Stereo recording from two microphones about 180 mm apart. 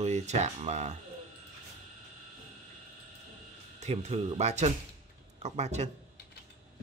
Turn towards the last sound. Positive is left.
turn(degrees=-40)  # may be behind; listen again after turning